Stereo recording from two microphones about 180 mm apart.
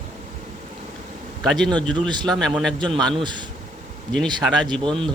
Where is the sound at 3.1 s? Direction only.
25° right (ahead or behind).